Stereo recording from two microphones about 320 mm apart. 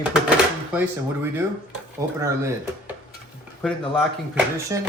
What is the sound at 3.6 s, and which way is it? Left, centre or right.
Speech, centre.